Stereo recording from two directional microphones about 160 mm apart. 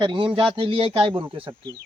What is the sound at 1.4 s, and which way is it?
Speech, 25° right (ahead or behind).